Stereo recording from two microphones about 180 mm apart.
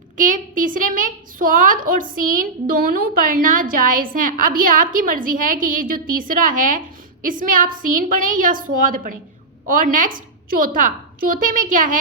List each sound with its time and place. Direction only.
0.2 s a woman's voice: 50° right (ahead or behind)